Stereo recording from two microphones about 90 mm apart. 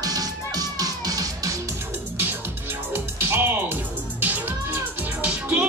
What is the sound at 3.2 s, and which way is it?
Music, 25° right (ahead or behind).